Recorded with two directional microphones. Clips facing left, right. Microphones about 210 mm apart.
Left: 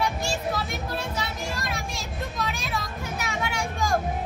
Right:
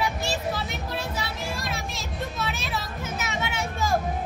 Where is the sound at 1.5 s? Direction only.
Centre (ahead or behind).